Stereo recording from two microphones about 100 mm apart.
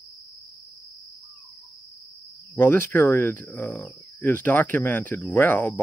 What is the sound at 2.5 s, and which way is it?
Speech, 20° left (ahead or behind).